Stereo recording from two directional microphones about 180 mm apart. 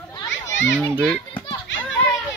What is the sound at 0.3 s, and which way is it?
Children playing, 90° left.